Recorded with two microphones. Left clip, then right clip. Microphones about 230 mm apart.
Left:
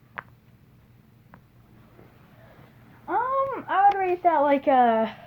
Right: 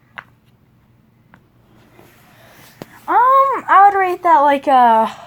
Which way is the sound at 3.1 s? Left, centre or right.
Right.